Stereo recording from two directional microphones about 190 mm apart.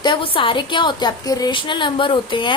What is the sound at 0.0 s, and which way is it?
A woman's voice, 25° left (ahead or behind).